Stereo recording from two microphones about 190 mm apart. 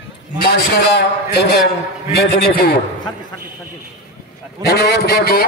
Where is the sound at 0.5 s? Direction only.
60° left (ahead or behind).